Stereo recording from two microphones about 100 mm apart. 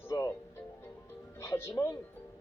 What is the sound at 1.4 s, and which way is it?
Speech, 25° left (ahead or behind).